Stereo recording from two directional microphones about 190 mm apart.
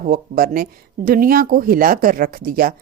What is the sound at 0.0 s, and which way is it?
Speech, 50° right (ahead or behind).